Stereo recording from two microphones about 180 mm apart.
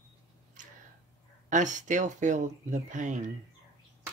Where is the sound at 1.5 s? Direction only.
45° right (ahead or behind).